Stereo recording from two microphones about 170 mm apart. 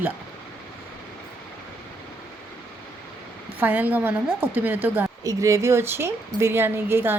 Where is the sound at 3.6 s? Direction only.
10° right (ahead or behind).